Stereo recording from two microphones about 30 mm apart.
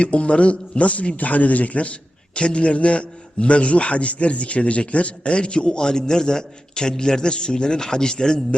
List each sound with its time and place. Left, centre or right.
0.0 s a man's voice: left